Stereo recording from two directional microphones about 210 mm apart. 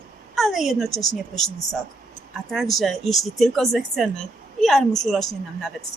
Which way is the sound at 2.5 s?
Centre (ahead or behind).